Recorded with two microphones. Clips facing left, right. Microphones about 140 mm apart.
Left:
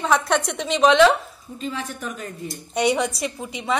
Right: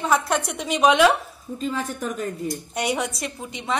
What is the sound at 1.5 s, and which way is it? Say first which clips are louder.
Speech: right 3 dB; 40° right (ahead or behind).